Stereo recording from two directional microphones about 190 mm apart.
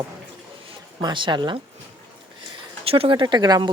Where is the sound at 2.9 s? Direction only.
30° right (ahead or behind).